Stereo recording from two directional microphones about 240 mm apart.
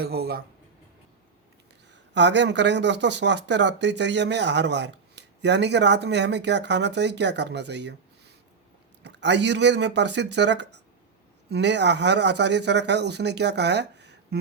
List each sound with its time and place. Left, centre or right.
0.0 s speech: right
2.1 s speech: right
9.0 s speech: right